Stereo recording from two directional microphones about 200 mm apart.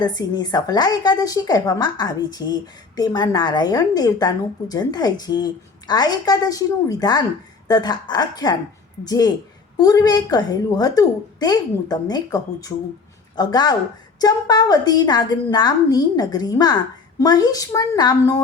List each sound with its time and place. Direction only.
0.0 s a woman's voice: 20° left (ahead or behind)